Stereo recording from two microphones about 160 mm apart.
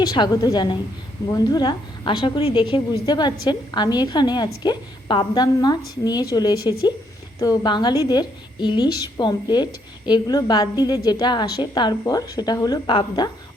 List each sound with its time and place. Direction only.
0.0 s a woman's voice: 25° left (ahead or behind)